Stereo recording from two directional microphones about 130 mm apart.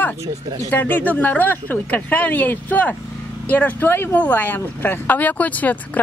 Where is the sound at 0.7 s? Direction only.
15° left (ahead or behind).